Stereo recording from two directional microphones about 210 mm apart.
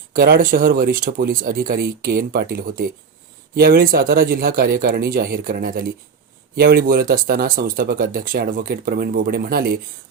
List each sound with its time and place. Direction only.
0.1 s speech: 45° right (ahead or behind)